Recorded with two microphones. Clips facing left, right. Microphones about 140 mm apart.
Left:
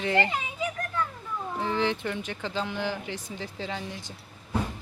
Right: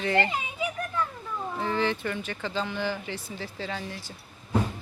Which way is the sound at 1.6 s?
15° left (ahead or behind).